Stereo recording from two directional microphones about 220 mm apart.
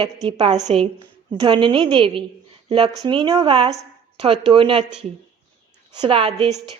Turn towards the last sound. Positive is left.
turn(degrees=-25)  # may be behind; listen again after turning